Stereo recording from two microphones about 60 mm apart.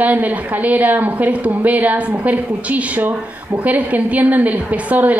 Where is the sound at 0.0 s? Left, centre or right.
Right.